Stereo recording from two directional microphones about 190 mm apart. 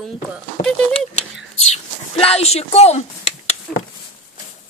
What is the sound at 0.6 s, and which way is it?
Speech, 35° left (ahead or behind).